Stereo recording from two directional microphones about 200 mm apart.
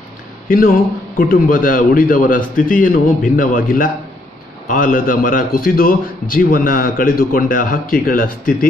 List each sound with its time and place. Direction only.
0.5 s a man's voice: 45° left (ahead or behind)